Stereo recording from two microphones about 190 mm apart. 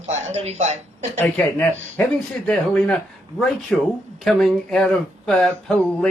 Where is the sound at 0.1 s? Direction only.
35° right (ahead or behind).